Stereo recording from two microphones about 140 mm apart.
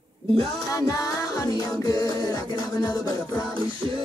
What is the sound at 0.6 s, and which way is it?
Music, 25° left (ahead or behind).